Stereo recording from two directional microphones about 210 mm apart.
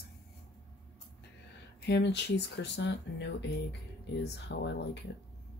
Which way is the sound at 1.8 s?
55° left (ahead or behind).